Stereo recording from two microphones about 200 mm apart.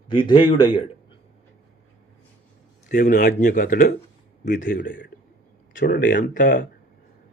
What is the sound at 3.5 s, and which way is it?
Speech, 45° left (ahead or behind).